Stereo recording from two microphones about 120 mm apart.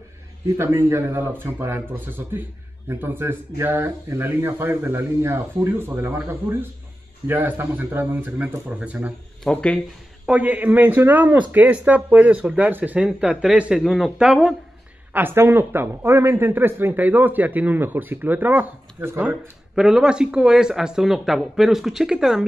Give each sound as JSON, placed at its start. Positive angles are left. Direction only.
{"t": 0.6, "sound": "speech", "side_deg": -20}
{"t": 9.4, "sound": "speech", "side_deg": 10}
{"t": 10.2, "sound": "speech", "side_deg": -10}
{"t": 15.1, "sound": "speech", "side_deg": -20}
{"t": 19.7, "sound": "speech", "side_deg": -5}